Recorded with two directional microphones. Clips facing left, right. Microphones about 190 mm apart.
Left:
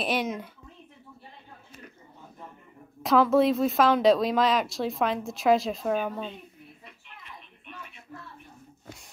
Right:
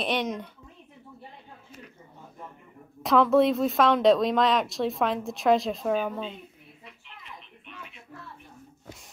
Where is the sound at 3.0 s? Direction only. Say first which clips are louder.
Right 1 dB; centre (ahead or behind).